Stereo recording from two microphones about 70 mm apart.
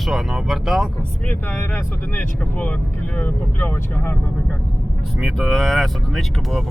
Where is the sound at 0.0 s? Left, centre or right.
Centre.